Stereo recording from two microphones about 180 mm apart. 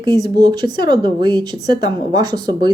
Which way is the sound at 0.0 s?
20° right (ahead or behind).